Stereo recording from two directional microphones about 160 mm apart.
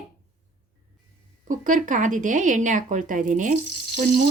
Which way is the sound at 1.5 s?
55° right (ahead or behind).